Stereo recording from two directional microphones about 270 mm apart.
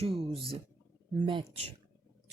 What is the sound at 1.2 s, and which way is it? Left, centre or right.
Speech, right.